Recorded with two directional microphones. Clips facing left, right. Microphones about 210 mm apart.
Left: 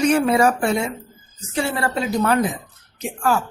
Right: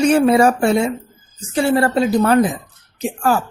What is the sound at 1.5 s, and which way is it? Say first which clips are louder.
Speech: right 7 dB; 35° right (ahead or behind).